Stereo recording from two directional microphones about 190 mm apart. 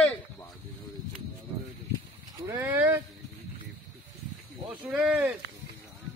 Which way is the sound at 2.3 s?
10° right (ahead or behind).